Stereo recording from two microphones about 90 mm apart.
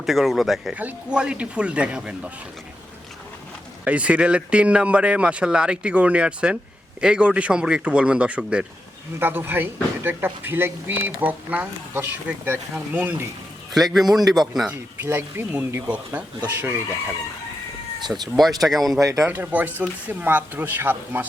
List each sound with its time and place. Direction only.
0.0 s speech: centre (ahead or behind)
0.8 s speech: 15° right (ahead or behind)
3.8 s speech: 15° right (ahead or behind)
9.1 s speech: 25° right (ahead or behind)
13.7 s speech: centre (ahead or behind)
14.7 s speech: 25° right (ahead or behind)
16.5 s speech: 20° right (ahead or behind)
18.1 s speech: centre (ahead or behind)
18.9 s speech: 40° right (ahead or behind)
19.3 s speech: 20° right (ahead or behind)